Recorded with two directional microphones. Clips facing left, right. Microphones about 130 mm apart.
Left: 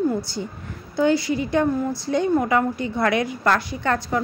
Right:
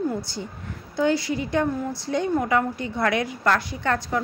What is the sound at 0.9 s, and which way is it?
A woman's voice, 15° left (ahead or behind).